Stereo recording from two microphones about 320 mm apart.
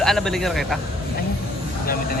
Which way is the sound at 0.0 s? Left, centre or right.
Centre.